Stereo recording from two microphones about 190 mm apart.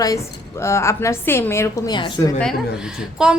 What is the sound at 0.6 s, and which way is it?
A woman's voice, 15° left (ahead or behind).